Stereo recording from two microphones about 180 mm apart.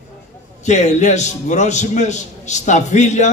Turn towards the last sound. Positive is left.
turn(degrees=40)  # may be behind; listen again after turning